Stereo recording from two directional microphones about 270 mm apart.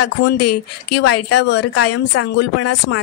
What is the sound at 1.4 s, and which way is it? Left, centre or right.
Speech, left.